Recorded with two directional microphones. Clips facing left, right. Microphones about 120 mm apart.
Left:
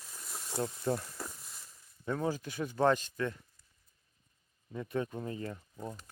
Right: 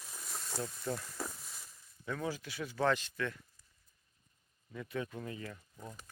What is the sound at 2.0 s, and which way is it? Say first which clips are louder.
Speech: left 5 dB; 30° left (ahead or behind).